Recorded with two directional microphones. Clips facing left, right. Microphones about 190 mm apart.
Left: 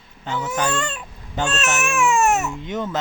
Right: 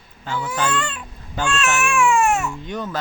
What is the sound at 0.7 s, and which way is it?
Babbling, 45° left (ahead or behind).